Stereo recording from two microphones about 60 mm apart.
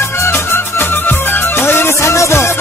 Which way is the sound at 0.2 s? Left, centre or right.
Left.